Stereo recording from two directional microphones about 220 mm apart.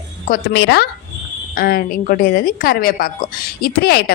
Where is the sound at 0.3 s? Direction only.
50° left (ahead or behind).